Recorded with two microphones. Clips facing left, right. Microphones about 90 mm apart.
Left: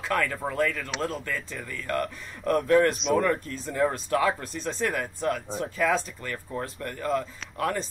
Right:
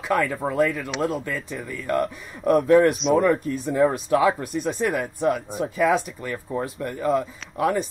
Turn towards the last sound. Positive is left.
turn(degrees=-10)  # may be behind; listen again after turning